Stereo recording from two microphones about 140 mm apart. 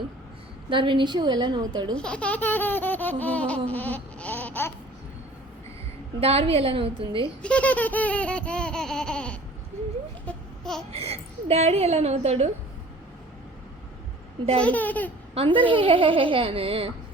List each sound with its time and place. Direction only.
0.7 s speech: 35° right (ahead or behind)
2.0 s baby laughter: 5° left (ahead or behind)
6.1 s speech: 45° right (ahead or behind)
7.4 s baby laughter: 10° left (ahead or behind)
10.2 s babbling: 5° left (ahead or behind)
10.9 s a woman's voice: 45° right (ahead or behind)
14.6 s baby laughter: 10° left (ahead or behind)
15.4 s speech: 35° right (ahead or behind)